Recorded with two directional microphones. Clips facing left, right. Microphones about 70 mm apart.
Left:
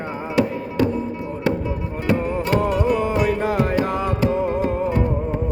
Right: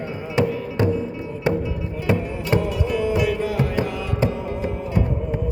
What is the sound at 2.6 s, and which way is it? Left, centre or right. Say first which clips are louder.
Music: left 3 dB; left.